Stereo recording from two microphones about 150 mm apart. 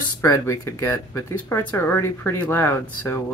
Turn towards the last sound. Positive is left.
turn(degrees=15)  # may be behind; listen again after turning